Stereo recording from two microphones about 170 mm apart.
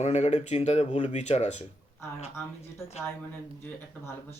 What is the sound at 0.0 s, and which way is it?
Speech, 40° left (ahead or behind).